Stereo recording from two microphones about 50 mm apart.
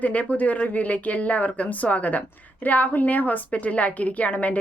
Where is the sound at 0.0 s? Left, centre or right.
Left.